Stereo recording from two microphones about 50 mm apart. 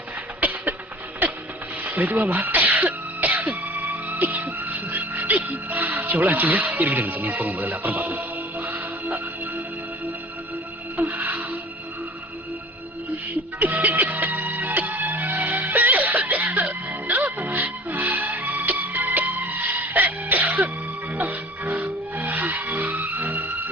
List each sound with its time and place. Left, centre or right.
0.3 s a sound: right
1.8 s music: right
11.1 s music: right
13.6 s music: right
22.2 s skidding: right